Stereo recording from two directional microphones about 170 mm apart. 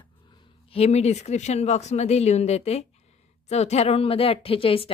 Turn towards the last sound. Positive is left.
turn(degrees=30)  # may be behind; listen again after turning